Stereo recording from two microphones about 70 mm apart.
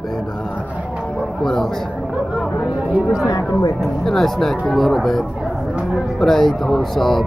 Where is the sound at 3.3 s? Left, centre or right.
Left.